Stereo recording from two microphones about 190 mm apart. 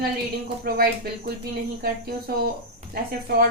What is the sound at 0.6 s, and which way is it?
Speech, 50° right (ahead or behind).